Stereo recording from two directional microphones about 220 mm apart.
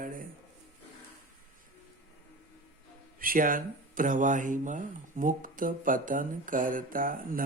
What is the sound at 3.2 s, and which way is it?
Speech, 40° right (ahead or behind).